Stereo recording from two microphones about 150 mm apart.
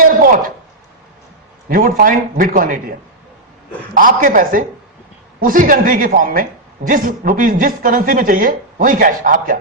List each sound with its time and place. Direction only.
0.0 s a sound: 70° right (ahead or behind)
1.7 s speech: 70° right (ahead or behind)
3.9 s speech: 65° right (ahead or behind)